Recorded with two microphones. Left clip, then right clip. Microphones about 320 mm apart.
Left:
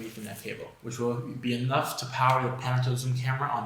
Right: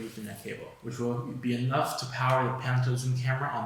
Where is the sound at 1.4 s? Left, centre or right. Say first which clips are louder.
Left 1 dB; centre.